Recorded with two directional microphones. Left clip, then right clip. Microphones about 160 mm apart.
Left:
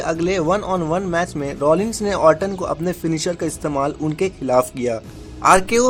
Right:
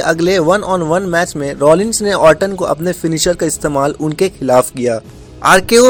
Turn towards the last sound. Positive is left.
turn(degrees=-30)  # may be behind; listen again after turning